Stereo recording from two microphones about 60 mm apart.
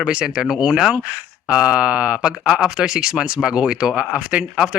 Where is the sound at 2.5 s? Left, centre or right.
Centre.